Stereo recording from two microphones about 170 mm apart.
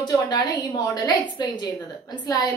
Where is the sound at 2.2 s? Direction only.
20° left (ahead or behind).